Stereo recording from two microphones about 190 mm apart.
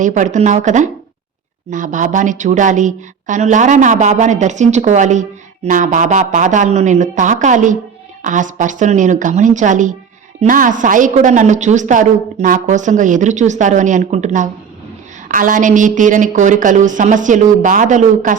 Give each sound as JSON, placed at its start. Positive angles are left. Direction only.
{"t": 0.0, "sound": "a woman's voice", "side_deg": -40}